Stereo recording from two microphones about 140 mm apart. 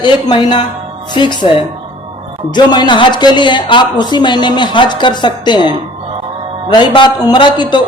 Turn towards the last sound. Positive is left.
turn(degrees=35)  # may be behind; listen again after turning